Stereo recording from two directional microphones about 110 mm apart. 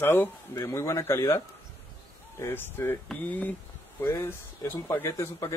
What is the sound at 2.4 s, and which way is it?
Speech, 20° left (ahead or behind).